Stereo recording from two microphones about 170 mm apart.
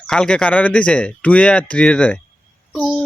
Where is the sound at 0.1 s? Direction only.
5° left (ahead or behind).